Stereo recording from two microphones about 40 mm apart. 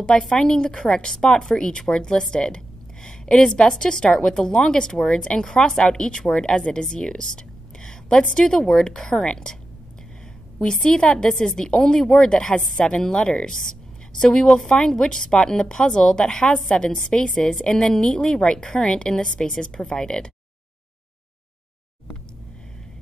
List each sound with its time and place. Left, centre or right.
0.3 s a woman's voice: centre
8.2 s a woman's voice: left
8.5 s a woman's voice: centre
10.6 s a woman's voice: centre